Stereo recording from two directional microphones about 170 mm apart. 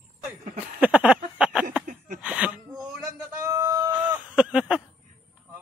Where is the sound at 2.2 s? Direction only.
5° right (ahead or behind).